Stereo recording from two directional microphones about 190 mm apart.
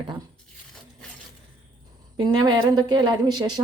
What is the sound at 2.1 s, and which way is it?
A woman's voice, 20° right (ahead or behind).